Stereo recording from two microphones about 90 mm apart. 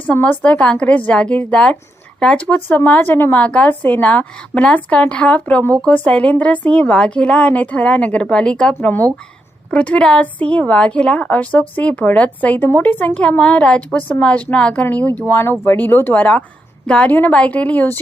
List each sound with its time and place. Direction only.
0.1 s a woman's voice: 15° left (ahead or behind)